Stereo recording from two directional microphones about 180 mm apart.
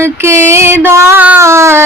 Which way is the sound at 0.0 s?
15° right (ahead or behind).